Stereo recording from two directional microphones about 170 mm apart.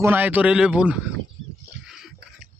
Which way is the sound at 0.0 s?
10° right (ahead or behind).